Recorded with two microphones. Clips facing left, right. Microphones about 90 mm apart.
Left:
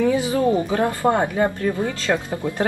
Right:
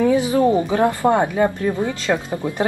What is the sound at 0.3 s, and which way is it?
A woman's voice, 20° right (ahead or behind).